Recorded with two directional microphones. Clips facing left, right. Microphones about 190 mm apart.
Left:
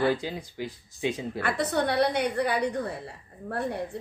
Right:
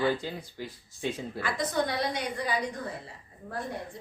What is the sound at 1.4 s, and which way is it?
A woman's voice, 65° left (ahead or behind).